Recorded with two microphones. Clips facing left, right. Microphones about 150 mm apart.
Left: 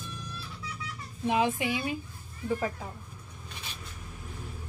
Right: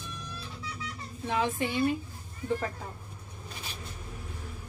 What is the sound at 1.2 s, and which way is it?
Speech, 15° left (ahead or behind).